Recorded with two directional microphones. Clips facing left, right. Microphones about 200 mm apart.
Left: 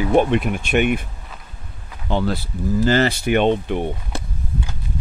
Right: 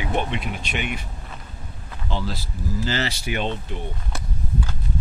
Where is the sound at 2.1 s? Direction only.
60° left (ahead or behind).